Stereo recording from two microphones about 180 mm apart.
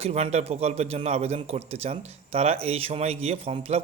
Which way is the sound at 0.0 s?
35° right (ahead or behind).